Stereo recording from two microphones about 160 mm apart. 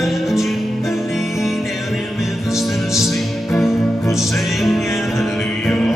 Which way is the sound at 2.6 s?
Centre (ahead or behind).